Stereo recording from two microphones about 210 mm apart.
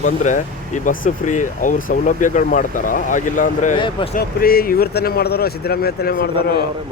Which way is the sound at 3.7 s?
25° left (ahead or behind).